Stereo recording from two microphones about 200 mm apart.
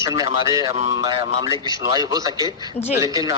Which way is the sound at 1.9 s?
20° right (ahead or behind).